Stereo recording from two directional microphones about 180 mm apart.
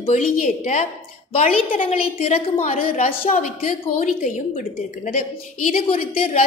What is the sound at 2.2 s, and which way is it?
A woman's voice, 35° left (ahead or behind).